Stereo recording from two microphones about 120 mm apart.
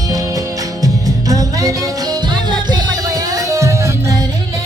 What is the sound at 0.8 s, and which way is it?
Music, 30° right (ahead or behind).